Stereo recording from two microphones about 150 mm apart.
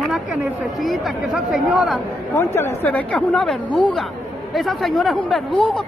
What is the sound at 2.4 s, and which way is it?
A woman's voice, 20° left (ahead or behind).